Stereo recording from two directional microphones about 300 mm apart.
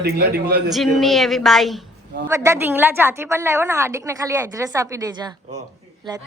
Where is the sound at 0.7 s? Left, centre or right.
Centre.